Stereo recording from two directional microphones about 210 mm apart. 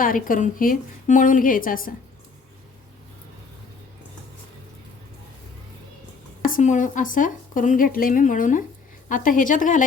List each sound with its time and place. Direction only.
0.0 s speech: 40° left (ahead or behind)
6.4 s speech: 40° left (ahead or behind)